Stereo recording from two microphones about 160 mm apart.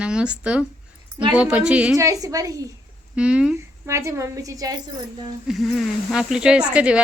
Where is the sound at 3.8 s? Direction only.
15° right (ahead or behind).